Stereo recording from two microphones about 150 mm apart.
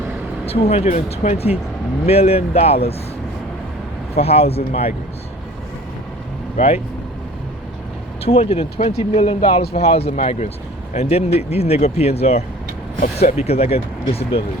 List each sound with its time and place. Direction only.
0.4 s speech: 40° left (ahead or behind)
4.1 s speech: 45° left (ahead or behind)
6.6 s speech: 45° left (ahead or behind)
8.2 s speech: 40° left (ahead or behind)